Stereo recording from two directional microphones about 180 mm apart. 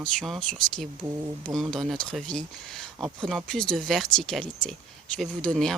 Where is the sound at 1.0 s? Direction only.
20° right (ahead or behind).